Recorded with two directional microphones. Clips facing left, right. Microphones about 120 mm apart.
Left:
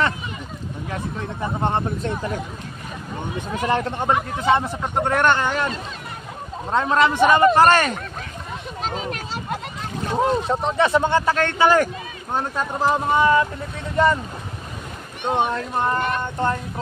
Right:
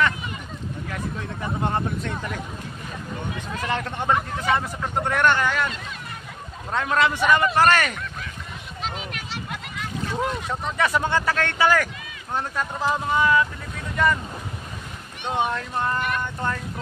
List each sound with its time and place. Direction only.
0.8 s speech: 25° left (ahead or behind)
3.6 s speech: 35° left (ahead or behind)
6.7 s speech: 25° left (ahead or behind)
15.2 s speech: 35° left (ahead or behind)